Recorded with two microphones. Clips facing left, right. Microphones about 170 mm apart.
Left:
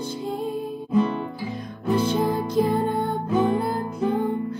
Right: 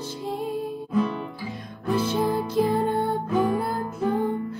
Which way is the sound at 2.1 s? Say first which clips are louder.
Left 1 dB; centre (ahead or behind).